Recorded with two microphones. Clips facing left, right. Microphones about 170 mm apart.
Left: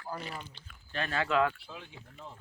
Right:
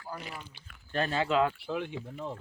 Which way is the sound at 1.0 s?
25° right (ahead or behind).